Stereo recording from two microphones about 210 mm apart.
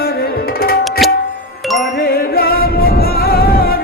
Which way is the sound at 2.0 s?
45° left (ahead or behind).